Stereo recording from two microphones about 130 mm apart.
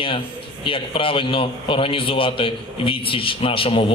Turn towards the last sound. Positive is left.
turn(degrees=45)  # may be behind; listen again after turning